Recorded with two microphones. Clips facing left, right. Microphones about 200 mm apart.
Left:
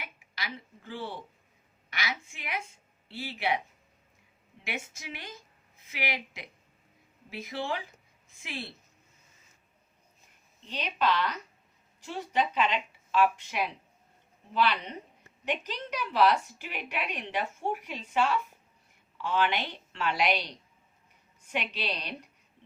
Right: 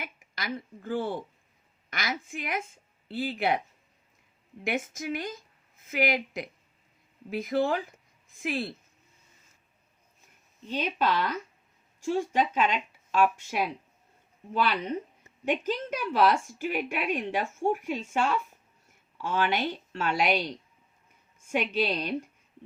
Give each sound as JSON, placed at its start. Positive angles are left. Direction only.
{"t": 0.0, "sound": "speech", "side_deg": -45}
{"t": 4.6, "sound": "speech", "side_deg": -50}
{"t": 10.7, "sound": "speech", "side_deg": -45}
{"t": 21.5, "sound": "speech", "side_deg": -45}